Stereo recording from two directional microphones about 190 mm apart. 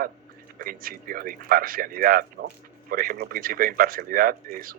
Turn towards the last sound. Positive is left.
turn(degrees=-50)  # may be behind; listen again after turning